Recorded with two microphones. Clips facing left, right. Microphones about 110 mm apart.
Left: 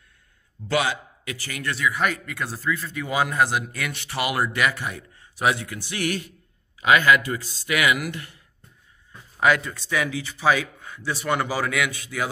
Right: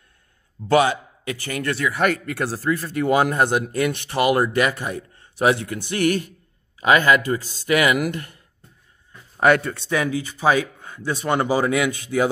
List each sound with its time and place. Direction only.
0.7 s a man's voice: 35° right (ahead or behind)
1.4 s speech: 50° right (ahead or behind)
2.5 s speech: 75° right (ahead or behind)
3.0 s speech: 50° right (ahead or behind)
4.2 s speech: 40° right (ahead or behind)
9.4 s speech: 55° right (ahead or behind)
9.8 s speech: 35° right (ahead or behind)